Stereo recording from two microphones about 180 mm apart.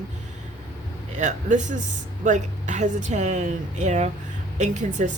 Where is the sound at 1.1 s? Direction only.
45° right (ahead or behind).